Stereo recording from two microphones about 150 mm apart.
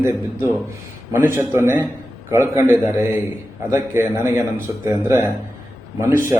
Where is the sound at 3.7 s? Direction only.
15° right (ahead or behind).